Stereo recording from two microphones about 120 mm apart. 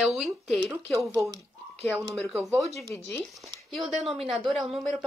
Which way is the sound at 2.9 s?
20° left (ahead or behind).